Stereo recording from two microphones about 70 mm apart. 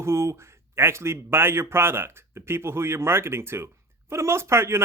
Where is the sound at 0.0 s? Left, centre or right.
Right.